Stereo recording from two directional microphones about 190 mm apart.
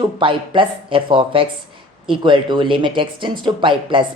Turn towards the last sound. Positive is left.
turn(degrees=-25)  # may be behind; listen again after turning